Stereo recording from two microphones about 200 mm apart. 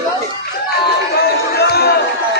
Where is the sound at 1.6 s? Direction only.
55° left (ahead or behind).